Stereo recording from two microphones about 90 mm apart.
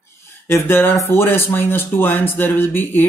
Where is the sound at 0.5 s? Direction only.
30° left (ahead or behind).